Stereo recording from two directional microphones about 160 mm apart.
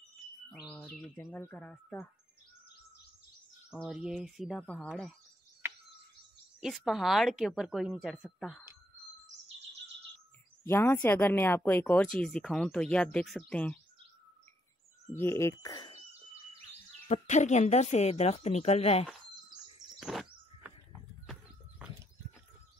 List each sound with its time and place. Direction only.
0.7 s bird: 5° left (ahead or behind)
1.3 s speech: 10° left (ahead or behind)
3.7 s speech: 10° left (ahead or behind)
4.0 s a woman's voice: 5° right (ahead or behind)
4.6 s speech: 5° left (ahead or behind)
6.6 s a woman's voice: centre (ahead or behind)
10.6 s speech: 15° left (ahead or behind)
15.1 s speech: 15° left (ahead or behind)
17.1 s speech: 45° left (ahead or behind)
19.0 s bird: 5° right (ahead or behind)
21.3 s horse: 5° right (ahead or behind)